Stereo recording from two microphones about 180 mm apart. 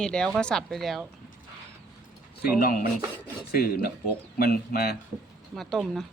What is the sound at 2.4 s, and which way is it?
Speech, 55° left (ahead or behind).